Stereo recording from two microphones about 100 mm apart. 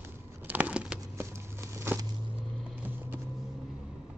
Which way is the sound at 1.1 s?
25° right (ahead or behind).